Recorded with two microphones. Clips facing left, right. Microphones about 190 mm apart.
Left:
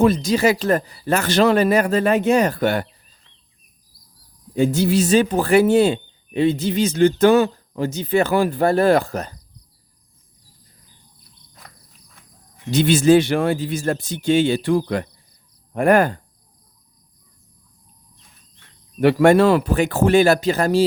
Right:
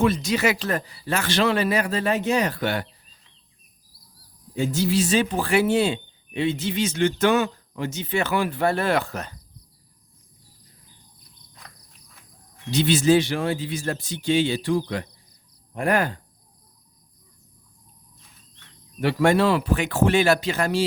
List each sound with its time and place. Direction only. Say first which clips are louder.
0.0 s speech: left 5 dB; 35° left (ahead or behind)
4.5 s speech: left 5 dB; 55° left (ahead or behind); by 9.4 s 40° left (ahead or behind)
12.7 s speech: left 5 dB; 50° left (ahead or behind)
18.9 s speech: left 6 dB; 55° left (ahead or behind); by 20.8 s 40° left (ahead or behind)